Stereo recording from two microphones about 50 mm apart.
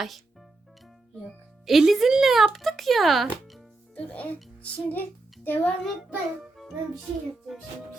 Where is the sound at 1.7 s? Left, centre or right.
Centre.